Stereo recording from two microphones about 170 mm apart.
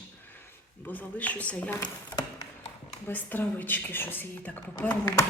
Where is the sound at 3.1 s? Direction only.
10° left (ahead or behind).